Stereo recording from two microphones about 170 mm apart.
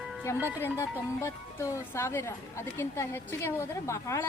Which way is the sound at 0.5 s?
15° left (ahead or behind).